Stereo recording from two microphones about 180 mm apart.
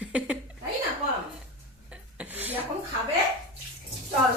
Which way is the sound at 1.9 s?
10° right (ahead or behind).